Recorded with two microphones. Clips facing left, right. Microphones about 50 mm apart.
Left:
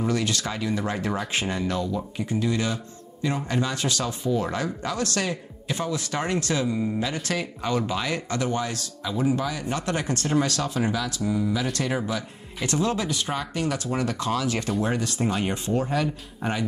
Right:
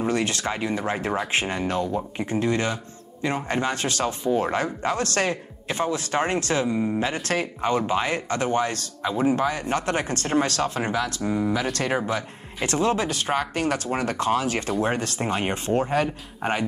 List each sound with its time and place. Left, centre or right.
0.0 s speech: right